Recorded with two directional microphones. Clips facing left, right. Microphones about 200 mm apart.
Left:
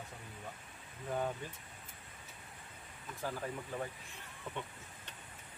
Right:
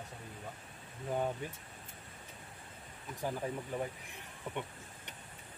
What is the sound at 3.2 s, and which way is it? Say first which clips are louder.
Speech: right 3 dB; 15° right (ahead or behind).